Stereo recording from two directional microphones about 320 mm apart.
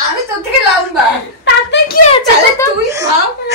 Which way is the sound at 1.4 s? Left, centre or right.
Left.